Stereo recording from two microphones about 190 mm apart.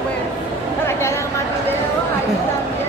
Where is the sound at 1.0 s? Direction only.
15° left (ahead or behind).